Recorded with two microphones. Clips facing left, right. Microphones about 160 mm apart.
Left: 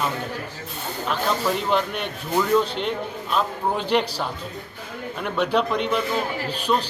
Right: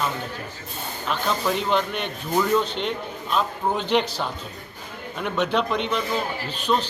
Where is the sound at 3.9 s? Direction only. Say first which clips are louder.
Even; centre (ahead or behind).